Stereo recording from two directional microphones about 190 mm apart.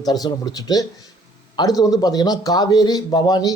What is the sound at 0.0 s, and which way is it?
Speech, 20° left (ahead or behind).